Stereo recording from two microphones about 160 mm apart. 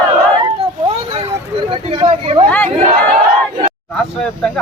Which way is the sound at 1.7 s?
35° right (ahead or behind).